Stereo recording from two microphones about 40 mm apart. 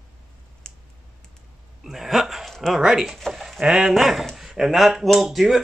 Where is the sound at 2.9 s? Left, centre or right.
Centre.